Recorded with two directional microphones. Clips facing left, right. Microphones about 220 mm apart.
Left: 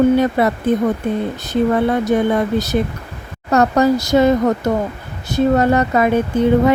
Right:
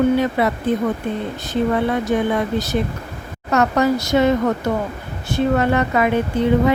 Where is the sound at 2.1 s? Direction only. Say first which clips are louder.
Left 3 dB; 50° left (ahead or behind).